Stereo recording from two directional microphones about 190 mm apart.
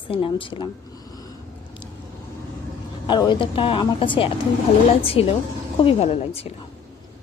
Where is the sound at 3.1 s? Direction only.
25° left (ahead or behind).